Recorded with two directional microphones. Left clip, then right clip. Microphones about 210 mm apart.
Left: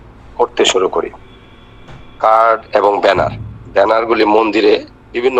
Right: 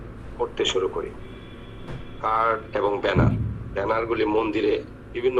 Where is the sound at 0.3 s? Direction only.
55° left (ahead or behind).